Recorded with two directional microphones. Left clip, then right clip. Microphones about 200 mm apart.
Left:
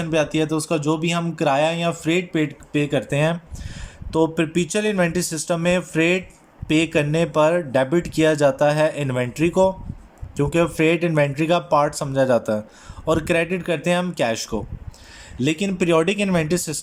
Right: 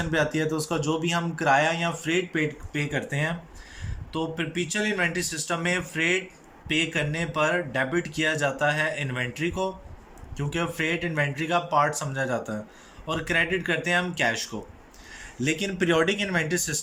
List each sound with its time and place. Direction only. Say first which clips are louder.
0.0 s speech: left 5 dB; 15° left (ahead or behind)